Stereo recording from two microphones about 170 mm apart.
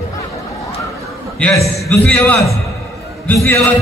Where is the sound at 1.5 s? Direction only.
20° left (ahead or behind).